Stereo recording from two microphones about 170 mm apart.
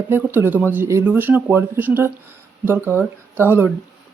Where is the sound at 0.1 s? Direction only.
15° right (ahead or behind).